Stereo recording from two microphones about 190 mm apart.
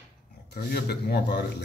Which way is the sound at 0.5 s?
55° left (ahead or behind).